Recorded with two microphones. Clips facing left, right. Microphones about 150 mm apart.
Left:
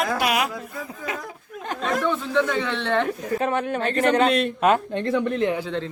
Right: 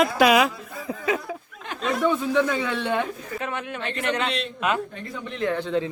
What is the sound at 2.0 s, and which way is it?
A man's voice, 10° right (ahead or behind).